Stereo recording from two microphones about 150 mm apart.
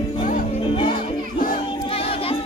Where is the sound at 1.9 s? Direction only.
40° left (ahead or behind).